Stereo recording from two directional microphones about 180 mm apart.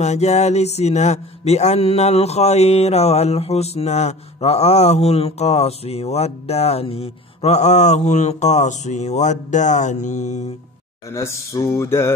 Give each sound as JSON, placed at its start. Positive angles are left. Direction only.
{"t": 0.0, "sound": "speech", "side_deg": 40}
{"t": 11.1, "sound": "mantra", "side_deg": 15}